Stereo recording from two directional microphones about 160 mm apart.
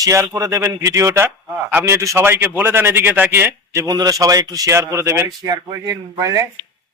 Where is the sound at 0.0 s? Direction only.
20° right (ahead or behind).